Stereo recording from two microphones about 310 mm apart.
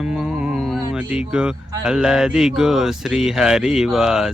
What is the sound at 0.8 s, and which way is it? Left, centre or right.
Speech, centre.